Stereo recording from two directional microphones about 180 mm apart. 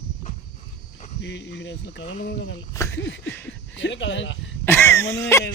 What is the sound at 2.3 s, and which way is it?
Speech, 70° left (ahead or behind).